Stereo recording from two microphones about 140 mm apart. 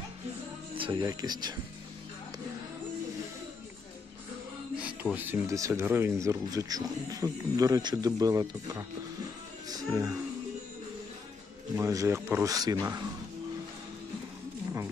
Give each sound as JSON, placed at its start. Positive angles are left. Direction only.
{"t": 0.7, "sound": "speech", "side_deg": -35}
{"t": 4.7, "sound": "speech", "side_deg": -10}
{"t": 9.7, "sound": "music", "side_deg": -20}
{"t": 11.7, "sound": "speech", "side_deg": -25}